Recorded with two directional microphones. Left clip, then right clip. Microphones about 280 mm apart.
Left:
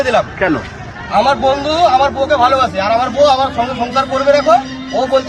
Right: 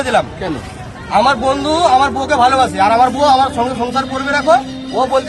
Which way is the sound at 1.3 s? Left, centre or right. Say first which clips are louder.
Left 2 dB; centre.